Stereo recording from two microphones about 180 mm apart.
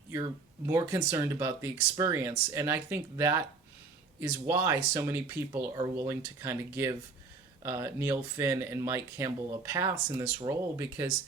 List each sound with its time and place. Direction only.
0.1 s speech: 20° right (ahead or behind)